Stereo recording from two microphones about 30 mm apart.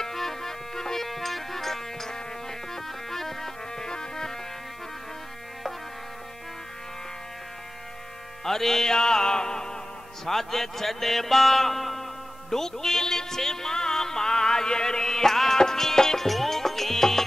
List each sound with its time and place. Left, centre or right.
0.0 s music: centre
8.5 s music: centre
8.9 s music: left
10.2 s a man's voice: centre
12.4 s music: centre